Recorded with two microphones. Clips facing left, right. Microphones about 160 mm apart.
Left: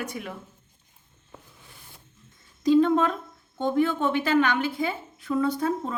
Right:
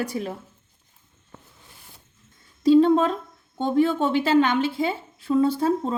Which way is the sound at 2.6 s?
30° right (ahead or behind).